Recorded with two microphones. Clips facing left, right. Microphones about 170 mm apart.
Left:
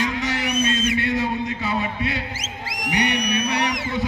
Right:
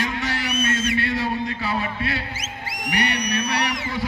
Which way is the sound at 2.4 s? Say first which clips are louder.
Left 1 dB; 90° left.